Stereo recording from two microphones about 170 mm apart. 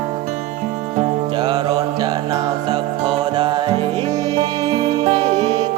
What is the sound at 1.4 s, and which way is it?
Music, 25° right (ahead or behind).